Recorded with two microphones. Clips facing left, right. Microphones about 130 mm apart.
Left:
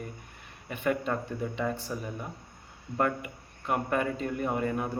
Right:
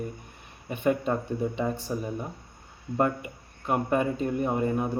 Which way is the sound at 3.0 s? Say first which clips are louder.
Right 3 dB; 20° right (ahead or behind).